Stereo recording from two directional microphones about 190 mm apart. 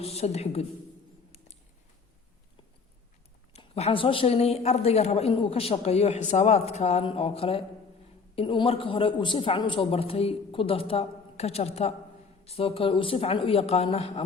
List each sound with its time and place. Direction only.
0.0 s a woman's voice: 30° left (ahead or behind)
3.5 s a woman's voice: 35° left (ahead or behind)